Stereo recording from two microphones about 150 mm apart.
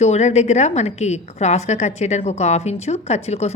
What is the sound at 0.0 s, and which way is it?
A woman's voice, 50° left (ahead or behind).